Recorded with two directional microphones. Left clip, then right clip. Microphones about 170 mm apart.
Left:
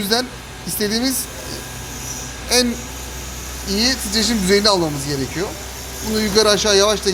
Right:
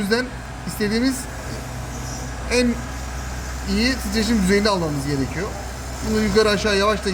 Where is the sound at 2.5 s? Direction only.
30° left (ahead or behind).